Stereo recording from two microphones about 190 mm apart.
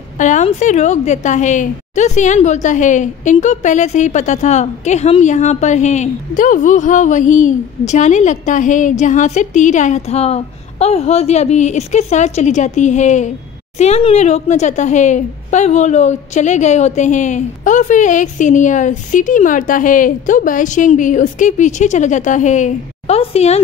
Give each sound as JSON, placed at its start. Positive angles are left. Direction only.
{"t": 0.2, "sound": "a woman's voice", "side_deg": 40}